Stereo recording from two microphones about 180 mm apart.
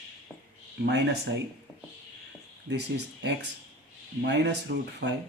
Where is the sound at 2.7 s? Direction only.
70° right (ahead or behind).